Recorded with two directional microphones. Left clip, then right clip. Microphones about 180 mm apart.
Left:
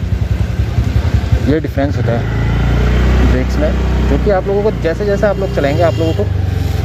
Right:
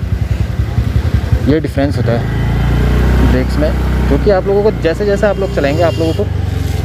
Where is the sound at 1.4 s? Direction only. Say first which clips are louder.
Right 2 dB; 10° right (ahead or behind).